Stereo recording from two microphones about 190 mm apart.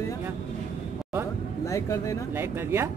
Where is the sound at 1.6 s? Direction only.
15° left (ahead or behind).